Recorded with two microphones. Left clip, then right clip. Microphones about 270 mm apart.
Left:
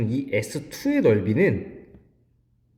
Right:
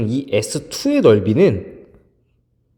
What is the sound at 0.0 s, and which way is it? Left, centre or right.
Speech, right.